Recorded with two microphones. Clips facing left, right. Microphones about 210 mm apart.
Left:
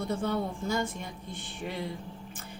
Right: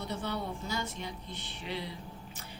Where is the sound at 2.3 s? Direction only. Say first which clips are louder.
Left 3 dB; 50° left (ahead or behind).